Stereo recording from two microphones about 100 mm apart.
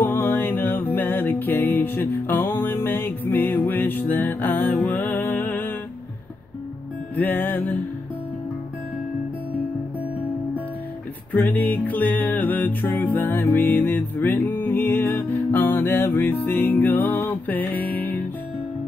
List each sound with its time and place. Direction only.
0.0 s music: 20° left (ahead or behind)
7.2 s music: 20° left (ahead or behind)
11.3 s music: 20° left (ahead or behind)